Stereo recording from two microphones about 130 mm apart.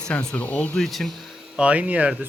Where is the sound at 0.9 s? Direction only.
Centre (ahead or behind).